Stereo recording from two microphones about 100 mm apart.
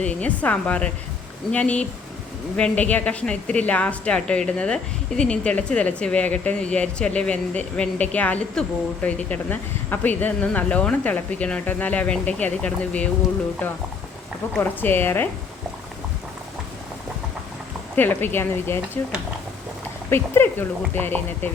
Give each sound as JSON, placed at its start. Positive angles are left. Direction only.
{"t": 0.0, "sound": "a woman's voice", "side_deg": 15}
{"t": 14.6, "sound": "speech", "side_deg": 20}
{"t": 17.9, "sound": "speech", "side_deg": 20}